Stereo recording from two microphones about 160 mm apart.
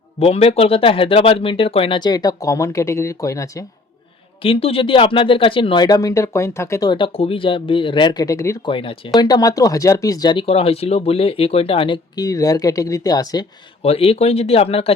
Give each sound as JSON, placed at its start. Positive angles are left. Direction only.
{"t": 0.2, "sound": "speech", "side_deg": 40}
{"t": 4.4, "sound": "speech", "side_deg": 35}
{"t": 8.7, "sound": "speech", "side_deg": 35}
{"t": 13.8, "sound": "speech", "side_deg": 35}